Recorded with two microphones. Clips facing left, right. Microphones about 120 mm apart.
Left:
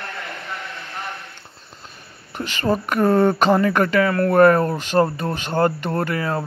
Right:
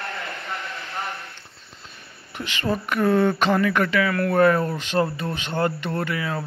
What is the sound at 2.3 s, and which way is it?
Speech, 40° left (ahead or behind).